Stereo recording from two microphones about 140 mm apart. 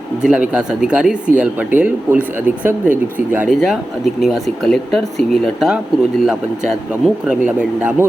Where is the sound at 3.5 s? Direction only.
Centre (ahead or behind).